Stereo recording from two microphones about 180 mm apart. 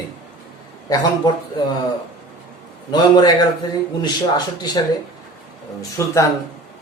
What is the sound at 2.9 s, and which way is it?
Speech, 25° left (ahead or behind).